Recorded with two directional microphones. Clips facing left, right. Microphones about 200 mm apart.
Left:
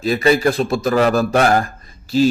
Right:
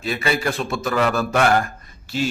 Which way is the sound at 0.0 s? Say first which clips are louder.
Left 8 dB; 40° left (ahead or behind).